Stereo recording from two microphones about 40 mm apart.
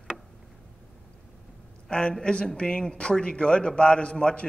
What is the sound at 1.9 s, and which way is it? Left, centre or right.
A man's voice, left.